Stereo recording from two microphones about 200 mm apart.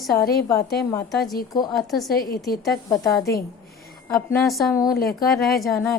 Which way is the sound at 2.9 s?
15° left (ahead or behind).